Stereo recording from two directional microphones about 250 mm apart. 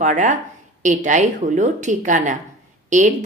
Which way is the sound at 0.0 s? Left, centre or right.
Right.